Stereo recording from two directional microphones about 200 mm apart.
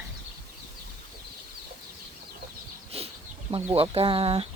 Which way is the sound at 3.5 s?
30° right (ahead or behind).